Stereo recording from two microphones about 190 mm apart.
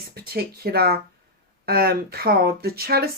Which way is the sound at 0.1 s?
55° right (ahead or behind).